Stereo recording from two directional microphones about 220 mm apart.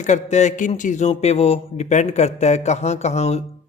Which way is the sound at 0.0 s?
30° left (ahead or behind).